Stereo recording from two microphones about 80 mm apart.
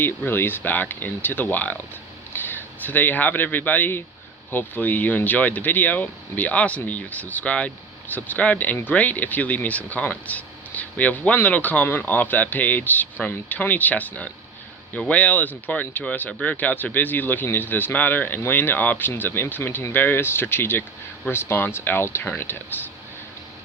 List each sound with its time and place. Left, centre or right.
0.0 s a man's voice: left